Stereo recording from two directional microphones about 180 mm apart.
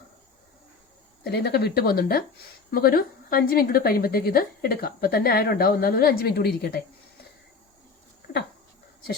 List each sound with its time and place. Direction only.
1.2 s a woman's voice: 65° left (ahead or behind)